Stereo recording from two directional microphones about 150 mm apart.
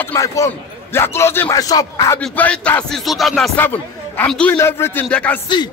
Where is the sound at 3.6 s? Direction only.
10° left (ahead or behind).